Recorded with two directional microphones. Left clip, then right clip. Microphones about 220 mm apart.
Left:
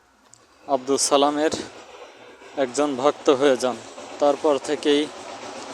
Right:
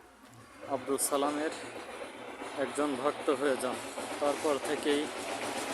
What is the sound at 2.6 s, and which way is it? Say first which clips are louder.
Speech: left 11 dB; 30° left (ahead or behind).